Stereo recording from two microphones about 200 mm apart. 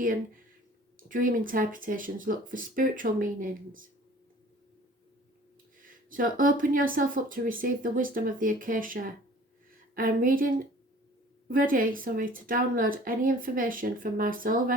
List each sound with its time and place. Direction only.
0.9 s speech: 45° right (ahead or behind)
6.1 s speech: 45° right (ahead or behind)